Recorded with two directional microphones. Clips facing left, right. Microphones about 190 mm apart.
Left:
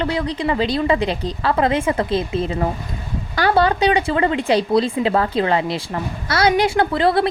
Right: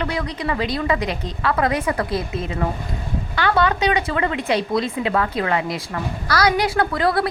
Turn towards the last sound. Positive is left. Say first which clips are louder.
# left 3 dB
turn(degrees=25)  # may be behind; listen again after turning